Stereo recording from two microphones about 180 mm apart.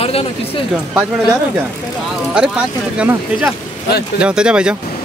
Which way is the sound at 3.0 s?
5° right (ahead or behind).